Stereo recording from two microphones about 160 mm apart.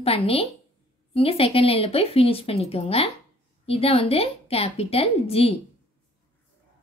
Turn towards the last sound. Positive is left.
turn(degrees=35)  # may be behind; listen again after turning